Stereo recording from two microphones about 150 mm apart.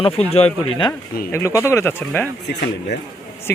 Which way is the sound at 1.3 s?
20° left (ahead or behind).